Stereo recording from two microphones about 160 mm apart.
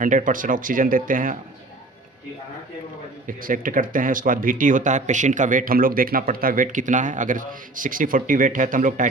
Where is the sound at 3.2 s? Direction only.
60° right (ahead or behind).